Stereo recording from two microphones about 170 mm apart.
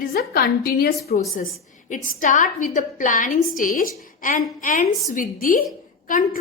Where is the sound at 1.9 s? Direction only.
50° left (ahead or behind).